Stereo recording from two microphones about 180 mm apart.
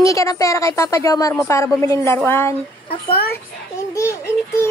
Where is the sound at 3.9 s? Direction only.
15° left (ahead or behind).